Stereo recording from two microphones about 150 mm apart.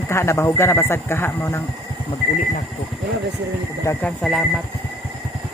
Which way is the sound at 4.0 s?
Centre (ahead or behind).